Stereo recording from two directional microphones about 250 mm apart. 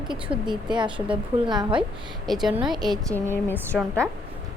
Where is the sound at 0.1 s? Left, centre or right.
Centre.